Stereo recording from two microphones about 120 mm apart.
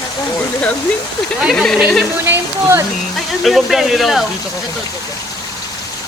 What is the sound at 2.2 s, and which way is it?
Speech, 20° right (ahead or behind).